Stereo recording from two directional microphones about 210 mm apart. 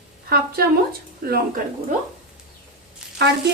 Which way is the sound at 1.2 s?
45° right (ahead or behind).